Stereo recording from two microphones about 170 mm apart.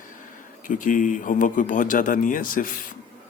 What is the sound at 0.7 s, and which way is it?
A man's voice, 50° left (ahead or behind).